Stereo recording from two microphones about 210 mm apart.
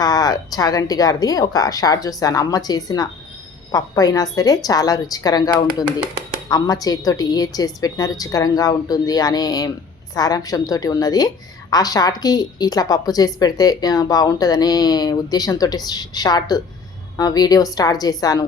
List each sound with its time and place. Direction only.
0.0 s a woman's voice: 20° left (ahead or behind)